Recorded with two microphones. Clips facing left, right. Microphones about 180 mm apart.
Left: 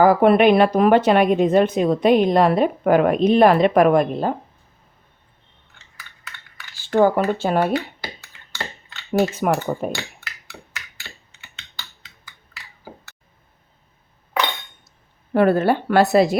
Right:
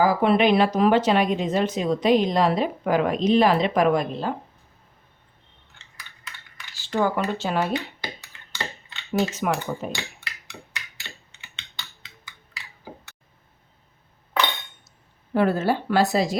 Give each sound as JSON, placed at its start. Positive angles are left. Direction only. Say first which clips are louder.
{"t": 0.0, "sound": "speech", "louder": "left 6 dB", "side_deg": 55}
{"t": 6.7, "sound": "speech", "louder": "left 7 dB", "side_deg": 50}
{"t": 9.1, "sound": "speech", "louder": "left 5 dB", "side_deg": 50}
{"t": 10.2, "sound": "a sound", "louder": "left 1 dB", "side_deg": 5}
{"t": 11.3, "sound": "computer keyboard", "louder": "left 1 dB", "side_deg": 5}
{"t": 15.3, "sound": "speech", "louder": "left 5 dB", "side_deg": 60}